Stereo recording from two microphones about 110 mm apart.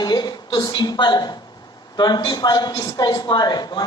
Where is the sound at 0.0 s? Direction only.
40° left (ahead or behind).